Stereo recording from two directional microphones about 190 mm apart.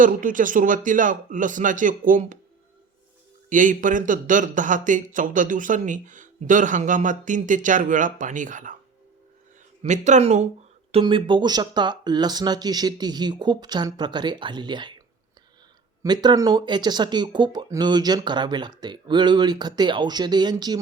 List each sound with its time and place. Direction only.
0.0 s speech: 45° right (ahead or behind)
3.5 s speech: 45° right (ahead or behind)
9.8 s speech: 40° right (ahead or behind)
10.9 s speech: 25° right (ahead or behind)
16.0 s speech: 20° right (ahead or behind)